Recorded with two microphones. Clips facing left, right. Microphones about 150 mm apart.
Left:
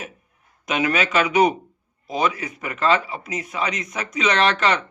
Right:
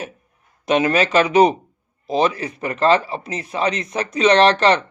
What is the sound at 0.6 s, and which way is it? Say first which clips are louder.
Speech: right 5 dB; 30° right (ahead or behind).